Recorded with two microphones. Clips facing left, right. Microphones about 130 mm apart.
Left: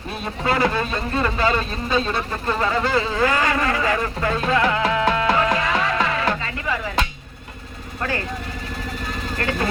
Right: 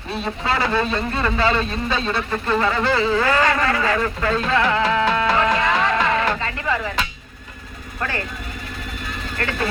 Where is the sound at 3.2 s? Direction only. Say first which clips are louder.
Right 1 dB; 15° left (ahead or behind).